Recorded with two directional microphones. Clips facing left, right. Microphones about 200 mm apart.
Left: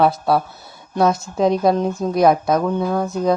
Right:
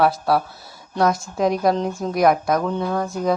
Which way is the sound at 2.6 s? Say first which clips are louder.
Left 3 dB; 10° left (ahead or behind).